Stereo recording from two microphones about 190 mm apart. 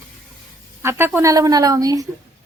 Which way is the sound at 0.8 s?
10° right (ahead or behind).